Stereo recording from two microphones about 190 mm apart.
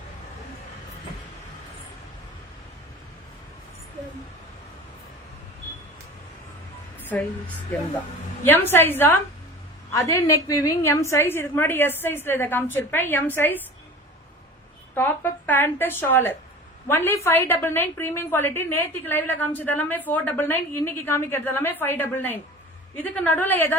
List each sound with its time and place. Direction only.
7.0 s a woman's voice: 10° left (ahead or behind)
14.9 s a woman's voice: 10° left (ahead or behind)